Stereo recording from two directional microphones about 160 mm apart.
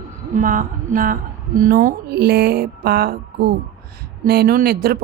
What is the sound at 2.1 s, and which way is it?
A woman's voice, 90° right.